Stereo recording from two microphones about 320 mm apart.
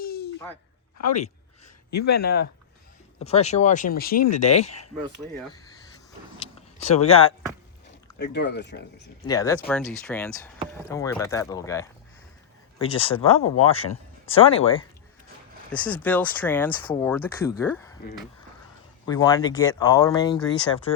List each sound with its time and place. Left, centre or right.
0.0 s a sound: left
1.9 s speech: left
2.2 s speech: left
3.2 s speech: centre
6.4 s a sound: centre
7.9 s speech: left
9.2 s speech: centre
13.3 s speech: left
14.3 s speech: centre
15.8 s speech: centre